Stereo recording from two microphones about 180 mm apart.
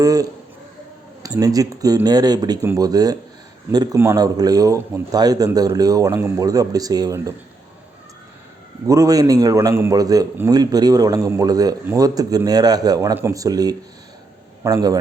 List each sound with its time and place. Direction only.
0.0 s a man's voice: 20° right (ahead or behind)
8.9 s a man's voice: 20° right (ahead or behind)